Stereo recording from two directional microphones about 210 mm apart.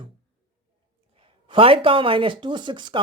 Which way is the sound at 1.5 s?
25° right (ahead or behind).